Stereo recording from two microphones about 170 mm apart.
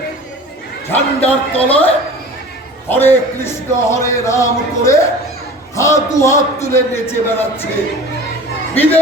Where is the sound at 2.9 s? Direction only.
15° left (ahead or behind).